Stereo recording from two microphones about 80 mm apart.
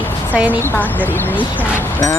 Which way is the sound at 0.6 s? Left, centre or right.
Left.